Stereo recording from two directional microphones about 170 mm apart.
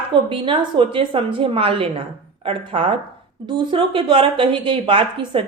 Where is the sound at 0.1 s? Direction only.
30° right (ahead or behind).